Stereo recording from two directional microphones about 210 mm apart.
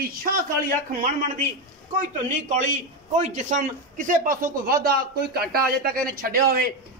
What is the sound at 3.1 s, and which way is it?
A man's voice, 35° right (ahead or behind).